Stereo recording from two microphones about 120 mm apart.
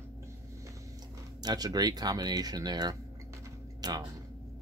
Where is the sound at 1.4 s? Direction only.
35° right (ahead or behind).